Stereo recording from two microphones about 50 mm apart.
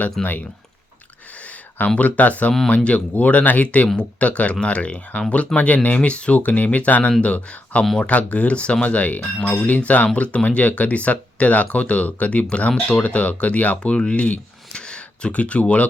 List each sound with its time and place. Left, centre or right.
0.2 s speech: centre
1.4 s a sound: left
2.0 s speech: left